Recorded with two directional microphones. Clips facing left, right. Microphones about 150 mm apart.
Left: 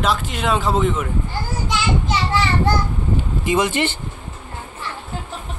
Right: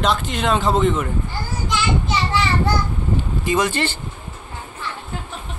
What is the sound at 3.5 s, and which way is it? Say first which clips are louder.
Speech: left 1 dB; 20° left (ahead or behind).